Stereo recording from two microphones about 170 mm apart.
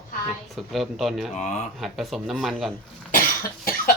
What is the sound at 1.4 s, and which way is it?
Speech, 45° left (ahead or behind).